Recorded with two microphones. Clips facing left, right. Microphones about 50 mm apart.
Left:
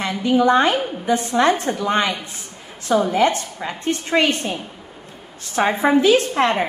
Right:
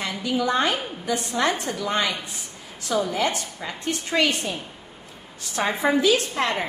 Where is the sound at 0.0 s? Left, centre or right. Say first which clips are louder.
Left 8 dB; left.